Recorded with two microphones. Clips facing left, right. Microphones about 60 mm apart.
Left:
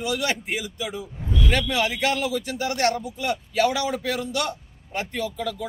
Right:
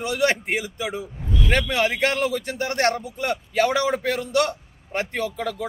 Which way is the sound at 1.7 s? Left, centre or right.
Right.